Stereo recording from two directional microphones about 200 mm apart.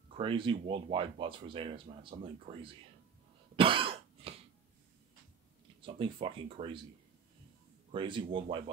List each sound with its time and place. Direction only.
0.2 s speech: 25° right (ahead or behind)
3.5 s cough: 25° right (ahead or behind)
5.8 s speech: 25° right (ahead or behind)
7.9 s speech: 25° right (ahead or behind)